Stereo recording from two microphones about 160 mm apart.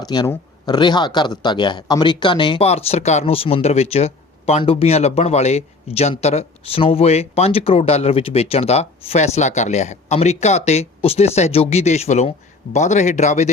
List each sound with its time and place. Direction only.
0.0 s speech: 25° left (ahead or behind); by 13.5 s 45° left (ahead or behind)